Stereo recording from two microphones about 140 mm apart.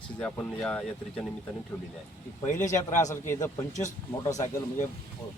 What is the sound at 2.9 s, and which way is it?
A man's voice, 60° left (ahead or behind).